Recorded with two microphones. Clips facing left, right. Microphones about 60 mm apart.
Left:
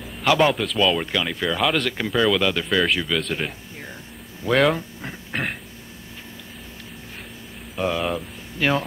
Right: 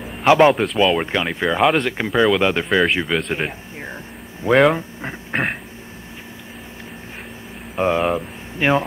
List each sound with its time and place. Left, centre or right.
0.0 s speech: right
4.7 s a sound: right
7.7 s speech: right